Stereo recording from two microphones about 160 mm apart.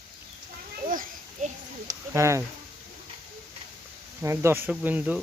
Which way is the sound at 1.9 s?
20° right (ahead or behind).